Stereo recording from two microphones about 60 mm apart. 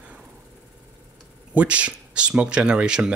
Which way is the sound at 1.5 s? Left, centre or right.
Right.